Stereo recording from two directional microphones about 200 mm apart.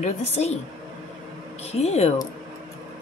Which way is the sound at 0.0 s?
30° left (ahead or behind).